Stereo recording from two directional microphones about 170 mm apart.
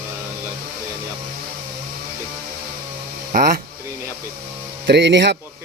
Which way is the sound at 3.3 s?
55° right (ahead or behind).